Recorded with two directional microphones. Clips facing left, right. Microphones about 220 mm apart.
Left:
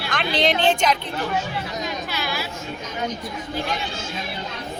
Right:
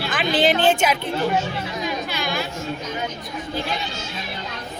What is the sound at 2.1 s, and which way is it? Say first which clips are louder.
Chatter: right 2 dB; 5° left (ahead or behind).